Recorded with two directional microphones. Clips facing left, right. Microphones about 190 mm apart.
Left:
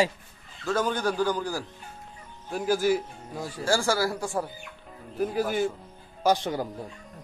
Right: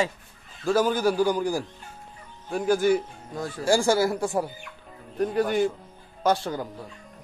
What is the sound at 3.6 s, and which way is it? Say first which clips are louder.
Speech: right 4 dB; 20° right (ahead or behind).